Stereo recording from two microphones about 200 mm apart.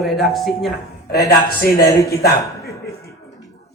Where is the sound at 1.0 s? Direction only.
55° left (ahead or behind).